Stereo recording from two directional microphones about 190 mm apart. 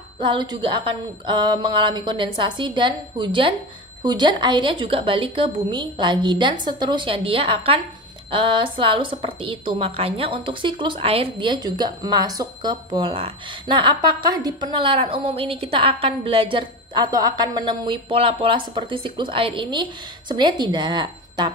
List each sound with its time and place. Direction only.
0.2 s a woman's voice: 25° right (ahead or behind)